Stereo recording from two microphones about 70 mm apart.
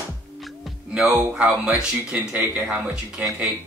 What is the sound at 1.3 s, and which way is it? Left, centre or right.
Speech, centre.